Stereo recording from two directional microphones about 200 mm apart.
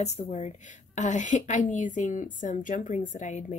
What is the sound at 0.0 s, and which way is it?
A woman's voice, 35° left (ahead or behind).